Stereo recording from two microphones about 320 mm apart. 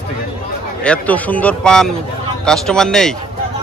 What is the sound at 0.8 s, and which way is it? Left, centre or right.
Speech, centre.